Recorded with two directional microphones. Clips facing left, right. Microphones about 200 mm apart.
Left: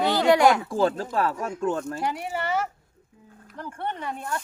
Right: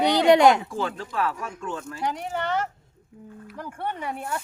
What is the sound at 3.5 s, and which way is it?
Speech, 10° right (ahead or behind).